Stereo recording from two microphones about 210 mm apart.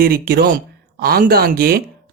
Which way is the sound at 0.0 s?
45° right (ahead or behind).